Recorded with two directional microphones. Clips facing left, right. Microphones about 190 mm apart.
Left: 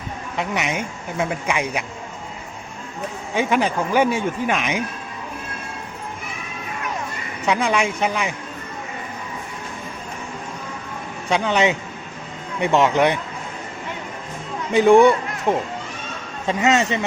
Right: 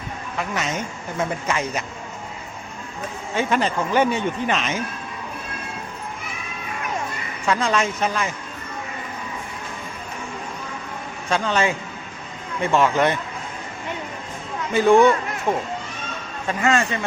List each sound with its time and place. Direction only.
0.3 s speech: 15° left (ahead or behind)
3.3 s speech: 10° left (ahead or behind)
7.4 s speech: 15° left (ahead or behind)
11.3 s speech: 15° left (ahead or behind)
14.7 s a man's voice: 15° left (ahead or behind)